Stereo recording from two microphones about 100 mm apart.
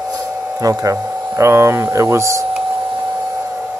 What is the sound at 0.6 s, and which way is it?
Speech, 35° right (ahead or behind).